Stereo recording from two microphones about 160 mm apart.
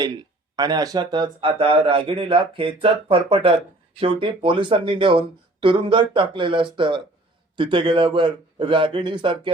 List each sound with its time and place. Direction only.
0.5 s a man's voice: 25° right (ahead or behind)